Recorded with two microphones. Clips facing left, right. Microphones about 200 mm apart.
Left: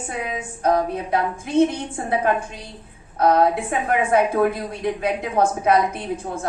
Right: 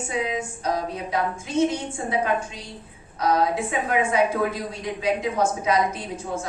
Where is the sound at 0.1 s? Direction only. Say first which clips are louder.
Right 2 dB; 55° left (ahead or behind).